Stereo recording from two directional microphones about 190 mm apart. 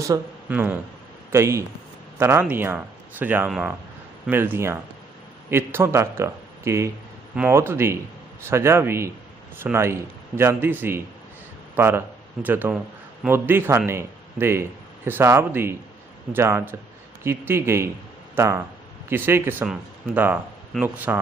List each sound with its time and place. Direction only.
0.0 s a man's voice: 15° right (ahead or behind)